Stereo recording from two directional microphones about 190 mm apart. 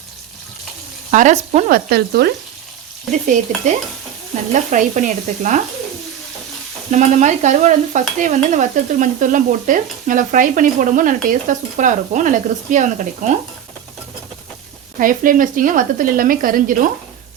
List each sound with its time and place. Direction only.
1.1 s stir: 40° right (ahead or behind); by 2.3 s 55° right (ahead or behind)
3.1 s stir: 40° right (ahead or behind)
6.9 s stir: 40° right (ahead or behind)
14.9 s stir: 45° right (ahead or behind)